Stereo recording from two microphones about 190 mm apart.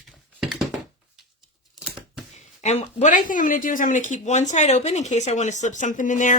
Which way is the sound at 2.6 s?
35° left (ahead or behind).